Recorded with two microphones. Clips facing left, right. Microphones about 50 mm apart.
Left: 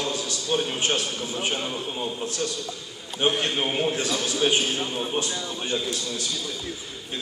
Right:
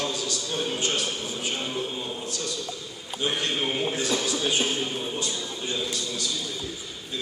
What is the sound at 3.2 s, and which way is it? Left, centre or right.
A man's voice, left.